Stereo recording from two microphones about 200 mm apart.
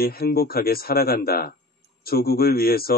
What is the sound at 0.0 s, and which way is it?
Speech, 50° left (ahead or behind).